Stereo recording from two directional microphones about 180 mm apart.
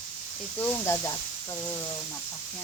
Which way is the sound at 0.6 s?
15° left (ahead or behind).